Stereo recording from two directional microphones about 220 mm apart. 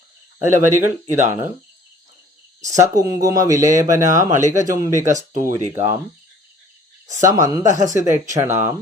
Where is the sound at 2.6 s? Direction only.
15° right (ahead or behind).